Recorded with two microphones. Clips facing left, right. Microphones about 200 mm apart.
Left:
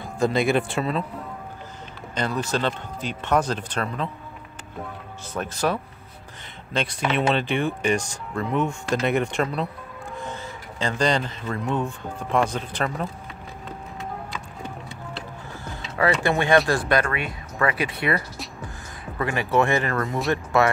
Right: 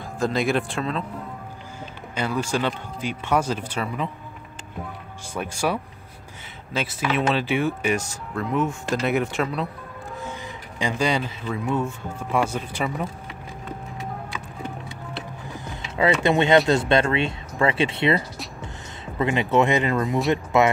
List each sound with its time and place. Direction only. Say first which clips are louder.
0.2 s speech: left 2 dB; centre (ahead or behind)
2.1 s speech: right 1 dB; 10° right (ahead or behind)
5.3 s speech: even; 10° right (ahead or behind)
10.8 s speech: even; 10° right (ahead or behind)
15.5 s speech: right 1 dB; 20° right (ahead or behind)